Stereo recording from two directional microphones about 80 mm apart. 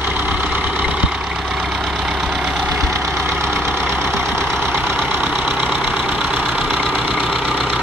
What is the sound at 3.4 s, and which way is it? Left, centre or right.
Vehicle, right.